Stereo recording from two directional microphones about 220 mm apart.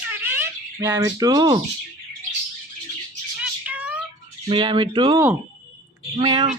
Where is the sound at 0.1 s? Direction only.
10° right (ahead or behind).